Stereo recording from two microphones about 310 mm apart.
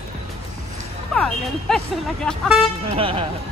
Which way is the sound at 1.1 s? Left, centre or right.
Centre.